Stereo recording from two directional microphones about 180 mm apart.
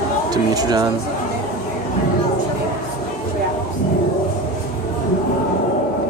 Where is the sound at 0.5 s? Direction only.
20° right (ahead or behind).